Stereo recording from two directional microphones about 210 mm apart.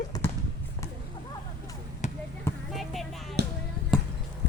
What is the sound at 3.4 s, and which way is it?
Music, 50° right (ahead or behind).